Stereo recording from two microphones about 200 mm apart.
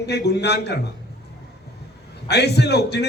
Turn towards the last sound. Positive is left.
turn(degrees=55)  # may be behind; listen again after turning